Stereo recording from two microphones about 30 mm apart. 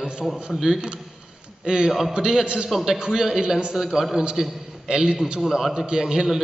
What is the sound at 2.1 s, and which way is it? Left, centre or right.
Speech, right.